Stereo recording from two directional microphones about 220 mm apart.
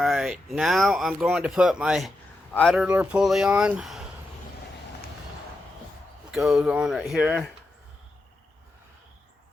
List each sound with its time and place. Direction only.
0.0 s speech: centre (ahead or behind)
6.3 s speech: centre (ahead or behind)